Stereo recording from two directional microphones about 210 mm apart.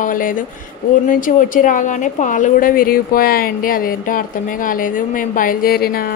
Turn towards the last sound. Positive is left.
turn(degrees=45)  # may be behind; listen again after turning